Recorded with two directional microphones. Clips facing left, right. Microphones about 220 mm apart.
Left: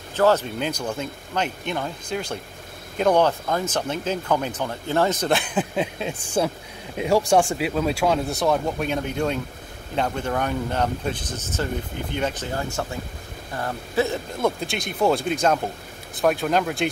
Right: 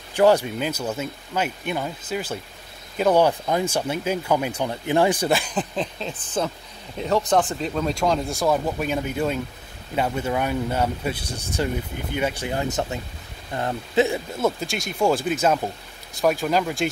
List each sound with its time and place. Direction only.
0.1 s speech: 15° right (ahead or behind)
5.3 s speech: 5° left (ahead or behind); by 14.2 s 15° right (ahead or behind)
14.4 s speech: centre (ahead or behind)